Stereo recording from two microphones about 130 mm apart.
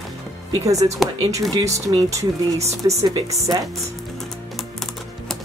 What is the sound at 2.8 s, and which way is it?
Speech, 40° right (ahead or behind).